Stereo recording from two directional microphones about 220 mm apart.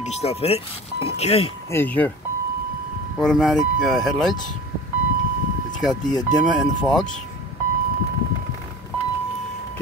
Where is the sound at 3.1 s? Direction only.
Centre (ahead or behind).